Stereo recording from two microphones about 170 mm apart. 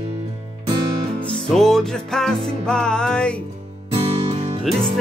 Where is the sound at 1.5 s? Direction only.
Centre (ahead or behind).